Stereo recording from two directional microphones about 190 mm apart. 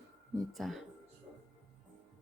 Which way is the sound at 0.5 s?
Centre (ahead or behind).